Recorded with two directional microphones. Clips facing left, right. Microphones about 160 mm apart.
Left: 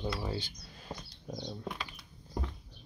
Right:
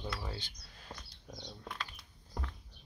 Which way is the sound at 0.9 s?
25° left (ahead or behind).